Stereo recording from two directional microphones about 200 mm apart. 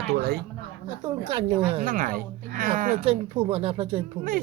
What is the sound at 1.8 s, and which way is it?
Speech, 40° right (ahead or behind).